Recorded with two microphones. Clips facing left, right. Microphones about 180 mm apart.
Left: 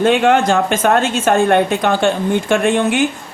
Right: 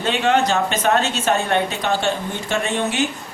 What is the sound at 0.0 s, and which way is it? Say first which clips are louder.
A woman's voice: left 6 dB; 50° left (ahead or behind).